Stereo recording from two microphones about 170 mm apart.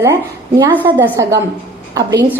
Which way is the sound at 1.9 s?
20° right (ahead or behind).